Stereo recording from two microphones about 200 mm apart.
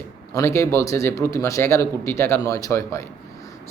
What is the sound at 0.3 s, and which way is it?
Speech, 15° left (ahead or behind).